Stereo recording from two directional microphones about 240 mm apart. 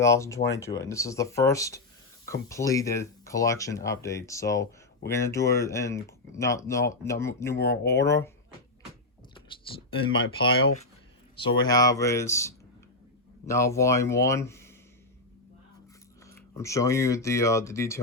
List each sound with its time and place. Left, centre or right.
0.0 s speech: centre
10.0 s speech: left
16.2 s speech: centre